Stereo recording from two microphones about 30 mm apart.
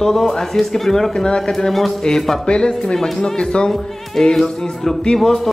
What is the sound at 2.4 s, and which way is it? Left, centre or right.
Speech, left.